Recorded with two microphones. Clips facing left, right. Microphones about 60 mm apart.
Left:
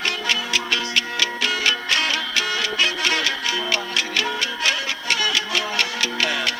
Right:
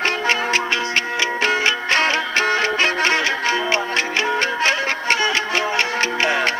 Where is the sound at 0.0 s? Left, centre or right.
Right.